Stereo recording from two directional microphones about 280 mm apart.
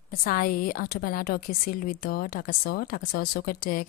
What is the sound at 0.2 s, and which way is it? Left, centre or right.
A woman's voice, left.